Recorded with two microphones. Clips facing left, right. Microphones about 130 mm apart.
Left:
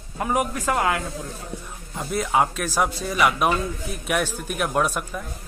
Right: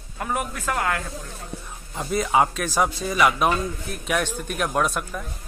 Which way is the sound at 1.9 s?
Centre (ahead or behind).